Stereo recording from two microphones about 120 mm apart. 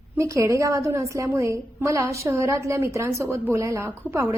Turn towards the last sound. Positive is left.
turn(degrees=-25)  # may be behind; listen again after turning